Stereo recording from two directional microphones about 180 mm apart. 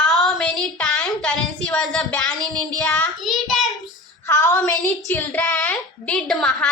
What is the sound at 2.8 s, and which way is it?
Child singing, 5° left (ahead or behind).